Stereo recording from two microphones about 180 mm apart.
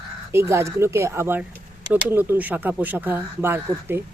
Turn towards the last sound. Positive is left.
turn(degrees=-15)  # may be behind; listen again after turning